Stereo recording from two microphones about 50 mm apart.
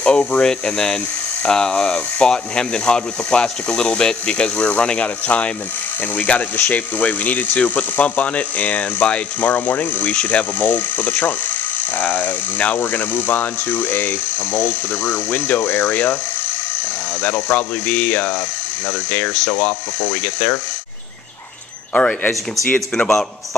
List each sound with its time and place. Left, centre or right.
0.0 s speech: left
17.2 s speech: left
19.5 s speech: left
22.7 s speech: left